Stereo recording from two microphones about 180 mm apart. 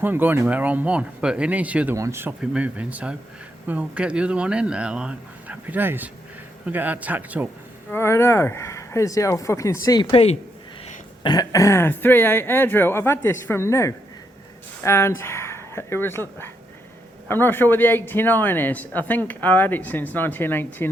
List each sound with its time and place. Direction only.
0.0 s speech: 10° right (ahead or behind)
7.9 s speech: 15° left (ahead or behind)